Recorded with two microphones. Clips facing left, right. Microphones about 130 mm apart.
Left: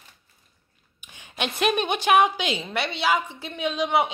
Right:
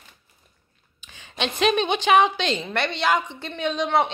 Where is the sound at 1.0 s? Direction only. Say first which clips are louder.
Right 2 dB; 15° left (ahead or behind).